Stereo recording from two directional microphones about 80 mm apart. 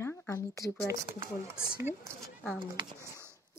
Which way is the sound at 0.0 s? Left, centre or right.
Left.